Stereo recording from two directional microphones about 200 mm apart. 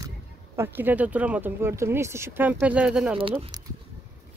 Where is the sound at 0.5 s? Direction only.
10° right (ahead or behind).